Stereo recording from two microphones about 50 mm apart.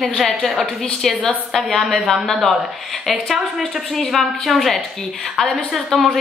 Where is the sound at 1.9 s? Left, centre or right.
Centre.